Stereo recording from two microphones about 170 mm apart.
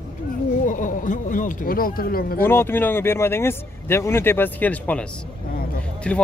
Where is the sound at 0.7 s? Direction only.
50° left (ahead or behind).